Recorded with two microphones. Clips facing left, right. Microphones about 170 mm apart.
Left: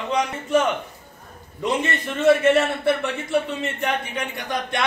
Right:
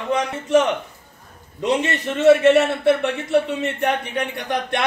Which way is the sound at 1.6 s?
70° right (ahead or behind).